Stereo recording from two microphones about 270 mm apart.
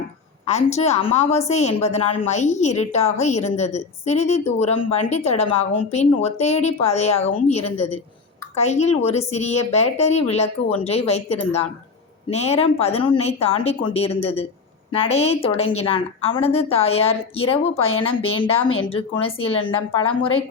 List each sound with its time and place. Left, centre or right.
0.4 s a woman's voice: left